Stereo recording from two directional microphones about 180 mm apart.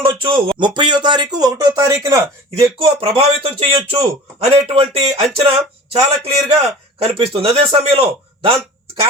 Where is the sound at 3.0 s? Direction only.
30° right (ahead or behind).